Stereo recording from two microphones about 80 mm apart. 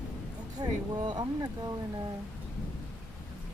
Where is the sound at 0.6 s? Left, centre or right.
Right.